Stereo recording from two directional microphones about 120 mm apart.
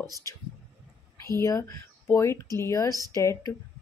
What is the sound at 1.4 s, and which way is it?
Speech, 25° left (ahead or behind).